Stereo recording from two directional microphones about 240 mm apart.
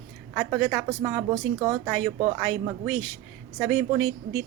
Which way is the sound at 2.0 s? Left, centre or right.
Right.